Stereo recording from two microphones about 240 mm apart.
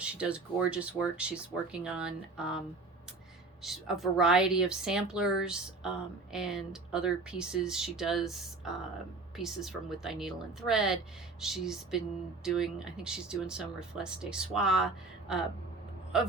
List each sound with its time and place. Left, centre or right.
0.0 s speech: centre
3.6 s speech: centre